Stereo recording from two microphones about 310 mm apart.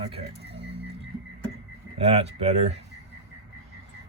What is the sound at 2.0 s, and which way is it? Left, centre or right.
Speech, centre.